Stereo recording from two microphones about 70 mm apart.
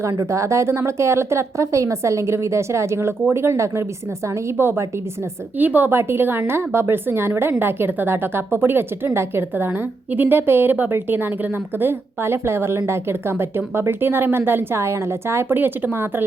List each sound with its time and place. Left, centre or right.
0.0 s a woman's voice: right